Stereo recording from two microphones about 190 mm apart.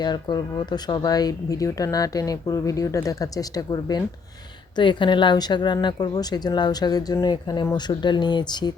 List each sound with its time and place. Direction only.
0.0 s speech: 20° left (ahead or behind)